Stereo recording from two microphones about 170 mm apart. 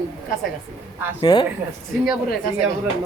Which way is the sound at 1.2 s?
25° left (ahead or behind).